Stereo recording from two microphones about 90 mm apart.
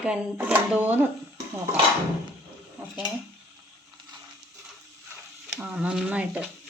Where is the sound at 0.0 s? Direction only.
10° right (ahead or behind).